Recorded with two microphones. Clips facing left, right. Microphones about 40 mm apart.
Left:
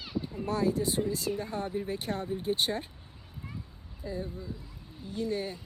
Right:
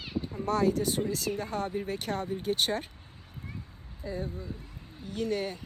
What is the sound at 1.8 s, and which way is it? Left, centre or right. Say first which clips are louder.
Speech: right 1 dB; right.